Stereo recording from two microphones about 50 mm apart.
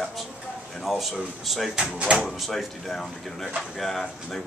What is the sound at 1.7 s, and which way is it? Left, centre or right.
Speech, right.